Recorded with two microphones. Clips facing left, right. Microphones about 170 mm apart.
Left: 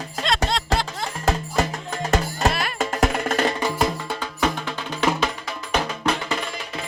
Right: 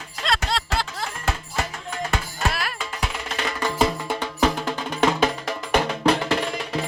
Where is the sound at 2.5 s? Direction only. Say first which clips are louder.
Left 2 dB; centre (ahead or behind).